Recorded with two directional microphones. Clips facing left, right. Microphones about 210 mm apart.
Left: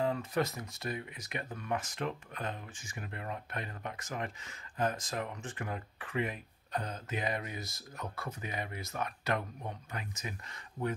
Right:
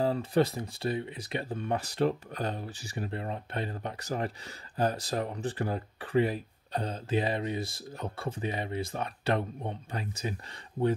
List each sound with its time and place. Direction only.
0.0 s speech: 35° right (ahead or behind)